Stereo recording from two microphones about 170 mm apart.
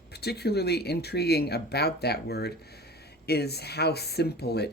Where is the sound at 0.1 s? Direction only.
70° left (ahead or behind).